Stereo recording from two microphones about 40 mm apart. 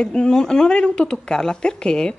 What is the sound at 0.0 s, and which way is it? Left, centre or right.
Speech, centre.